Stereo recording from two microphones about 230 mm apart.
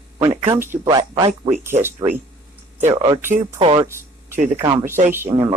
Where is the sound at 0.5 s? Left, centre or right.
Centre.